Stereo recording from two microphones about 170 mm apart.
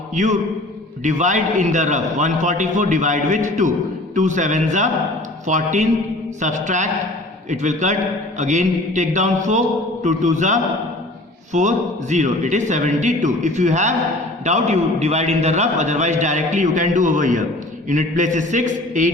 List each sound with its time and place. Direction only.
0.1 s a man's voice: 45° right (ahead or behind)